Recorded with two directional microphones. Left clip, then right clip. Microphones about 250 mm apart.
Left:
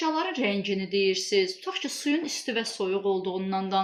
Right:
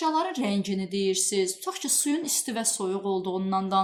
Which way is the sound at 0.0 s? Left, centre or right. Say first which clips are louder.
Right 1 dB; right.